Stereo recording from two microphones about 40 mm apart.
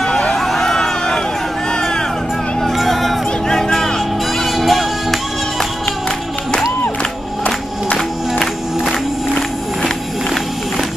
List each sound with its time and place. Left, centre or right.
0.4 s crowd: centre
1.7 s vehicle: centre
2.6 s vehicle: centre
3.4 s music: centre
4.4 s music: centre